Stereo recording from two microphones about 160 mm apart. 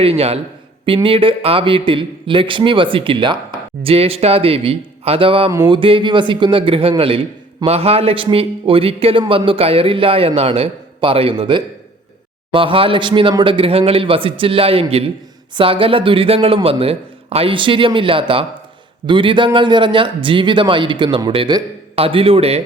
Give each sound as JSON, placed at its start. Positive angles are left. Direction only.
{"t": 0.0, "sound": "a man's voice", "side_deg": -40}
{"t": 5.5, "sound": "a man's voice", "side_deg": -25}